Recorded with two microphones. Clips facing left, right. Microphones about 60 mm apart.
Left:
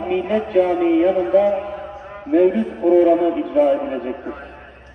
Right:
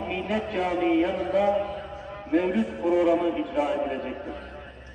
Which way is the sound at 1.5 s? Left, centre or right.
Left.